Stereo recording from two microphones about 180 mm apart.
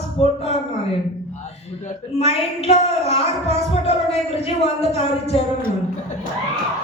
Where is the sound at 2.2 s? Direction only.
35° left (ahead or behind).